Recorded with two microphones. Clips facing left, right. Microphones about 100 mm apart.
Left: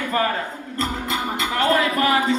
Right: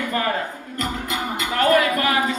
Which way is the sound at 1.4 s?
30° left (ahead or behind).